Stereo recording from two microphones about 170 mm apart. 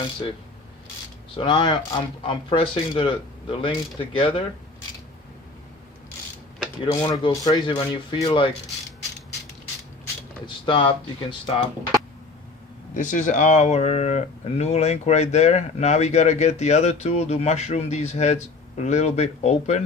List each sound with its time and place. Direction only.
1.4 s speech: 30° left (ahead or behind)
6.8 s speech: 25° left (ahead or behind)
10.4 s speech: 30° left (ahead or behind)
12.9 s speech: 50° left (ahead or behind)